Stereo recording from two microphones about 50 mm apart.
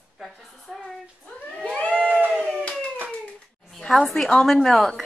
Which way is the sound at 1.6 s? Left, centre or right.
Left.